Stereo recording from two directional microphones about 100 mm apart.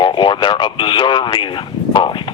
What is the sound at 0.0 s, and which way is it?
A man's voice, 55° left (ahead or behind).